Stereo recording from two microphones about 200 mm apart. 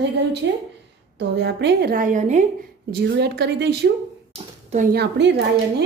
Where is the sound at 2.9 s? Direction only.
55° right (ahead or behind).